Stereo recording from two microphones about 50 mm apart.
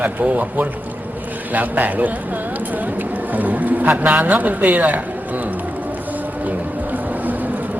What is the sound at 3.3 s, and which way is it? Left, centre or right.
Speech, right.